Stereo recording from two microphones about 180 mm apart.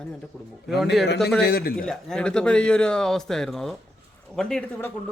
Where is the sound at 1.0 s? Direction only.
65° left (ahead or behind).